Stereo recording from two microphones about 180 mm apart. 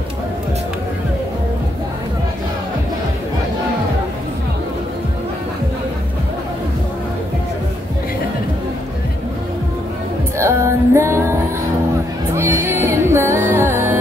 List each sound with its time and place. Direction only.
10.4 s music: 15° right (ahead or behind)
12.4 s music: 15° right (ahead or behind)